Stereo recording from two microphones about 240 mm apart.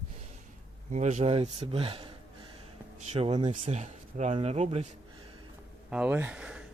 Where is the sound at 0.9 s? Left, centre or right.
Right.